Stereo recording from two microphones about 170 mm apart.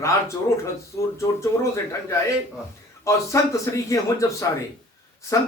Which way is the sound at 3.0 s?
20° left (ahead or behind).